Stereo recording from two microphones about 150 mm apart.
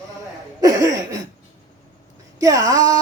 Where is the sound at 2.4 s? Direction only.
25° right (ahead or behind).